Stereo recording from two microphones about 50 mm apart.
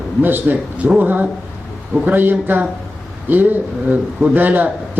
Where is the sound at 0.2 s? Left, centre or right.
Right.